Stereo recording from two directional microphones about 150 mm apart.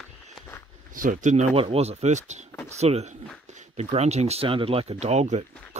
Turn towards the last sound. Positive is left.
turn(degrees=-50)  # may be behind; listen again after turning